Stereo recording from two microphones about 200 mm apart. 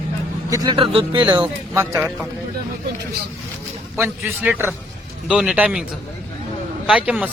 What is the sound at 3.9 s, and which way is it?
A man's voice, 10° right (ahead or behind).